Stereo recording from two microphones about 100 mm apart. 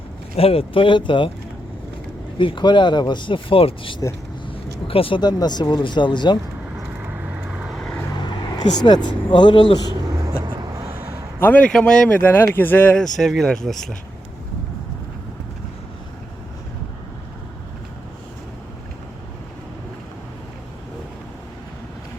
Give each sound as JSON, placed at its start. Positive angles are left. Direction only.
{"t": 0.3, "sound": "speech", "side_deg": 75}
{"t": 2.4, "sound": "speech", "side_deg": 55}
{"t": 5.2, "sound": "speech", "side_deg": 45}
{"t": 7.0, "sound": "vehicle", "side_deg": -15}
{"t": 7.8, "sound": "vehicle", "side_deg": 5}
{"t": 8.2, "sound": "speech", "side_deg": 45}
{"t": 10.1, "sound": "vehicle", "side_deg": -45}
{"t": 11.3, "sound": "a man's voice", "side_deg": 15}
{"t": 11.7, "sound": "speech", "side_deg": 5}
{"t": 13.0, "sound": "speech", "side_deg": 0}